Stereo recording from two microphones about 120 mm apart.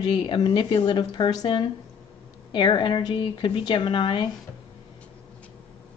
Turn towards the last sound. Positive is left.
turn(degrees=40)  # may be behind; listen again after turning